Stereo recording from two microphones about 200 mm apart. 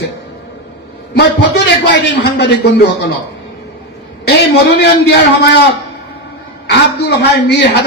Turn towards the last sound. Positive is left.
turn(degrees=60)  # may be behind; listen again after turning